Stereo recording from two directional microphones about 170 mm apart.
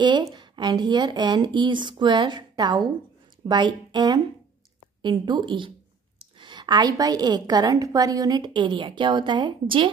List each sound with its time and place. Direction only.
0.0 s a woman's voice: 25° right (ahead or behind)